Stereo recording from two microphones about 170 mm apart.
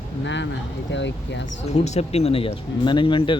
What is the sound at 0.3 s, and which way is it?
Speech, 90° left.